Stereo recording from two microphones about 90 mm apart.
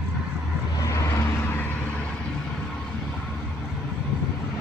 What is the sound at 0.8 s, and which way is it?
Vehicle, 35° left (ahead or behind).